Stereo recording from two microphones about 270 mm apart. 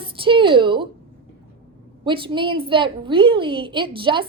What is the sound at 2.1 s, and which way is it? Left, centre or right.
A woman's voice, centre.